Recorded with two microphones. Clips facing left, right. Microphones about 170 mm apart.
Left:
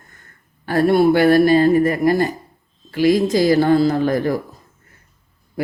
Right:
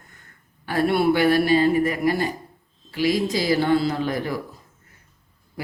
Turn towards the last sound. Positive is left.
turn(degrees=45)  # may be behind; listen again after turning